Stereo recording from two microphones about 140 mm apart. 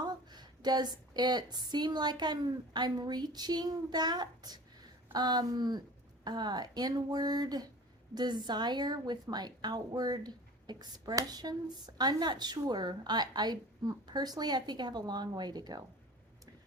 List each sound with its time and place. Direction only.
0.0 s a woman's voice: 30° right (ahead or behind)